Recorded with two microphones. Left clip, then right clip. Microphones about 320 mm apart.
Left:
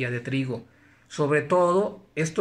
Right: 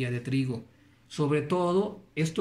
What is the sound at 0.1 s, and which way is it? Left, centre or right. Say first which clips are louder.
Speech: left 3 dB; centre.